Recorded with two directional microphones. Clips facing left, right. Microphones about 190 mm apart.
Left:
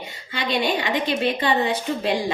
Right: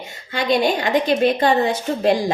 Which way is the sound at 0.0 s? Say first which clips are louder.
Right 4 dB; 50° right (ahead or behind).